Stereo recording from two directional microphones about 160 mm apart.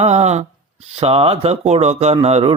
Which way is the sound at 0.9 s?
40° right (ahead or behind).